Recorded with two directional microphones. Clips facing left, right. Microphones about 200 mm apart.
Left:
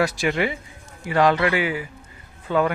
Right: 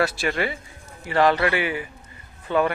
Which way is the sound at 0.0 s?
15° left (ahead or behind).